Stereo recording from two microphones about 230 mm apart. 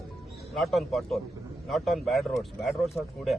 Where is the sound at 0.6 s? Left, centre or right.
Centre.